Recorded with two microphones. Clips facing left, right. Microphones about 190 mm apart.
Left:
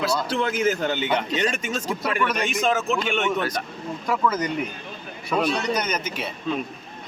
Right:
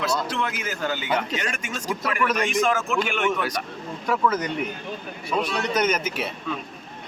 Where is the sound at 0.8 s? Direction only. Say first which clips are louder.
Left 2 dB; 25° left (ahead or behind).